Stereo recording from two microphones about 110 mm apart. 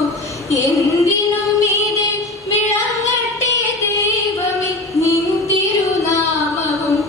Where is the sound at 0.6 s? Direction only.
30° left (ahead or behind).